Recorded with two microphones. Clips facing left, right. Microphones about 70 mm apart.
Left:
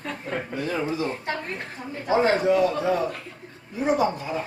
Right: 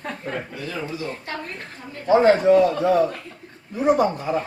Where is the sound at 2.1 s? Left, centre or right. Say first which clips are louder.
Right 5 dB; right.